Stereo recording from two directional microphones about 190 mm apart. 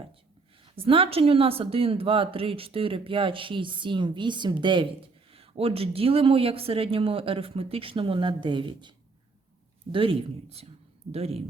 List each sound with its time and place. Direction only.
0.6 s speech: 30° right (ahead or behind)
9.9 s speech: 25° right (ahead or behind)